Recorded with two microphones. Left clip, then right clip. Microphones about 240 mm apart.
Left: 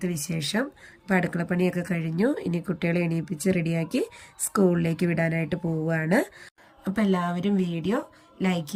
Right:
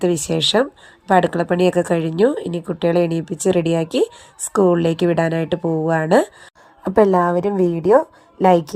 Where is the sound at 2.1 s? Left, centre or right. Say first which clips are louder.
Right 9 dB; centre.